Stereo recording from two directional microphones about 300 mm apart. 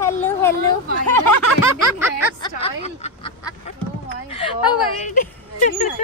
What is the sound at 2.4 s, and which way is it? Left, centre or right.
Speech, centre.